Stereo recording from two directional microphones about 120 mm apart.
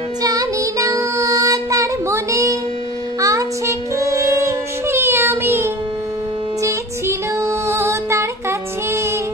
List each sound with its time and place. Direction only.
0.2 s child singing: 30° right (ahead or behind)
6.6 s music: 25° right (ahead or behind)